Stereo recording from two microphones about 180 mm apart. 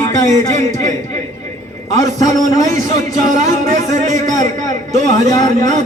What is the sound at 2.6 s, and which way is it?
A man's voice, 45° right (ahead or behind).